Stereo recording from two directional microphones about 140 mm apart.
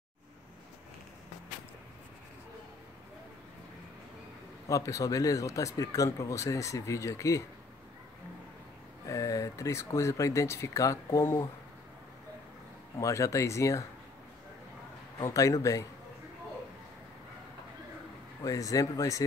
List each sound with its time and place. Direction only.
4.6 s speech: 25° left (ahead or behind)
9.0 s speech: 25° left (ahead or behind)
13.0 s speech: 20° left (ahead or behind)
15.1 s speech: 25° left (ahead or behind)
18.4 s speech: 25° left (ahead or behind)